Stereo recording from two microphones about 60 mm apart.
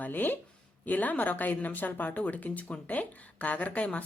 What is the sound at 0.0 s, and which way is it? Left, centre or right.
Speech, left.